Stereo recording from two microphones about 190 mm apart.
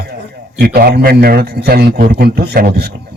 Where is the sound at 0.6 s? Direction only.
55° right (ahead or behind).